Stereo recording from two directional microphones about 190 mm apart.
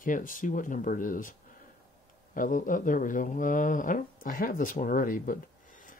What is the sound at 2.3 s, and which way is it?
Speech, 45° left (ahead or behind).